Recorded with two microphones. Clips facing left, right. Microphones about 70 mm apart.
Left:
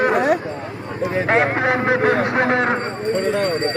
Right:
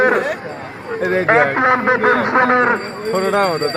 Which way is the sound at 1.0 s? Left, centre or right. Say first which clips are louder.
Right 4 dB; right.